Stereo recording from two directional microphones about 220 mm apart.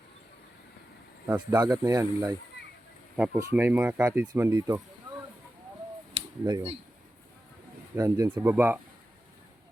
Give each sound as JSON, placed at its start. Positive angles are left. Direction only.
{"t": 1.3, "sound": "speech", "side_deg": -10}
{"t": 6.4, "sound": "speech", "side_deg": -15}
{"t": 7.9, "sound": "speech", "side_deg": -15}